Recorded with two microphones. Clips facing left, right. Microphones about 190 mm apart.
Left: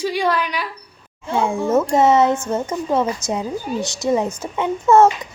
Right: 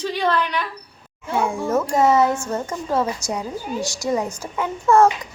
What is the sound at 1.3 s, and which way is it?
Speech, 25° left (ahead or behind).